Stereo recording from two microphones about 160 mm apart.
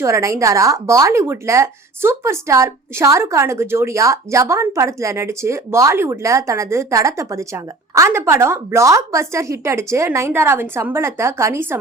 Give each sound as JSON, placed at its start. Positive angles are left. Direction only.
{"t": 0.0, "sound": "speech", "side_deg": -20}